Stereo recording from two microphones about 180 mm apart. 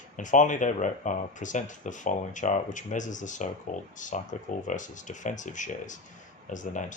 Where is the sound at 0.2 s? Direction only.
45° left (ahead or behind).